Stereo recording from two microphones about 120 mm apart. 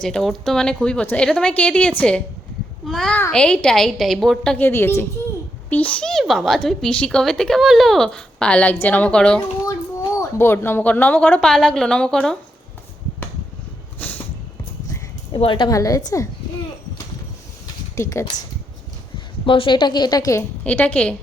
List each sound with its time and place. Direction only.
0.0 s a woman's voice: 5° left (ahead or behind)
3.1 s a woman's voice: 15° left (ahead or behind)
4.5 s a woman's voice: 20° left (ahead or behind)
9.6 s speech: 25° left (ahead or behind); by 12.4 s 5° left (ahead or behind)
14.0 s a sound: 15° left (ahead or behind)
15.4 s a woman's voice: 45° left (ahead or behind)
15.7 s a woman's voice: 30° left (ahead or behind)
17.9 s speech: 25° left (ahead or behind)
19.5 s a woman's voice: 45° left (ahead or behind); by 20.4 s 30° left (ahead or behind)
20.7 s speech: 15° left (ahead or behind)